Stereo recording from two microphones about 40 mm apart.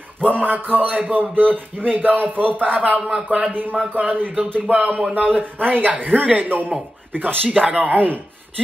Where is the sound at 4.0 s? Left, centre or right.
Right.